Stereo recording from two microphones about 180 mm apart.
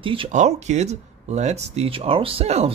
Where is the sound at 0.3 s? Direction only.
40° right (ahead or behind).